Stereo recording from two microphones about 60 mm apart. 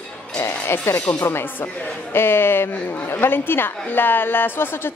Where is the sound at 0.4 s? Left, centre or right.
Left.